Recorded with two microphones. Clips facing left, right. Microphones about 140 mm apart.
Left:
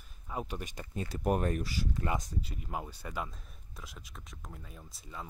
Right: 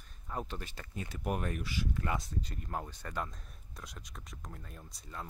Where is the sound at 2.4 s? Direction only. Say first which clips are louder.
Left 1 dB; 5° left (ahead or behind).